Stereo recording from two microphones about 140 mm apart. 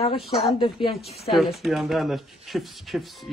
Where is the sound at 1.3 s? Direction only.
Centre (ahead or behind).